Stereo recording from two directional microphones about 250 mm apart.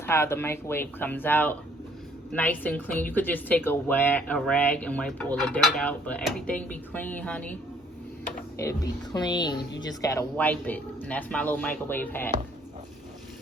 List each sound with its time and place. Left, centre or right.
0.0 s a woman's voice: centre
8.5 s a woman's voice: centre